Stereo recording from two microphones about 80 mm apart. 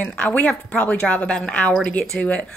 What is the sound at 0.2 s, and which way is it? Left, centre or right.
A woman's voice, centre.